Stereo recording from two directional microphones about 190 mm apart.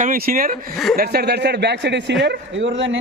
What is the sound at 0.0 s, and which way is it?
A man's voice, 45° right (ahead or behind).